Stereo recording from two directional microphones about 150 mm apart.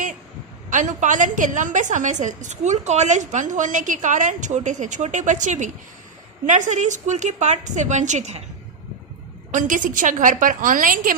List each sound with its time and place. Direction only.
0.7 s a woman's voice: 55° right (ahead or behind)
9.5 s a woman's voice: 60° right (ahead or behind)